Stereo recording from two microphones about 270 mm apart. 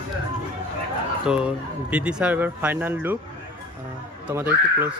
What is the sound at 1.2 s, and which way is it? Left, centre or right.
A man's voice, centre.